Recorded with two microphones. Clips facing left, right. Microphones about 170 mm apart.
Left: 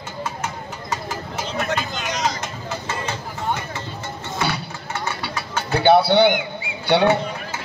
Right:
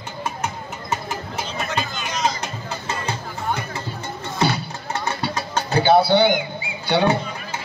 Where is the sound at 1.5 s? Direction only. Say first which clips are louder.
Left 3 dB; 75° left (ahead or behind).